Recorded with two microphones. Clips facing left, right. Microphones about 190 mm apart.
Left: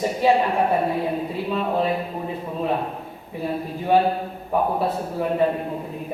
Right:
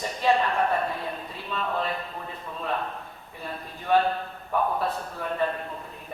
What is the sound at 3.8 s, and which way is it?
Speech, 10° left (ahead or behind).